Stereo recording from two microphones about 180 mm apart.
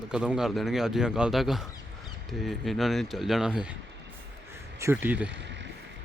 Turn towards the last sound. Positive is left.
turn(degrees=-10)  # may be behind; listen again after turning